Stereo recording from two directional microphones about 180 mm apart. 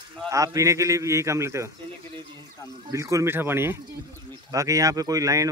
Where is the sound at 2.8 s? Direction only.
15° right (ahead or behind).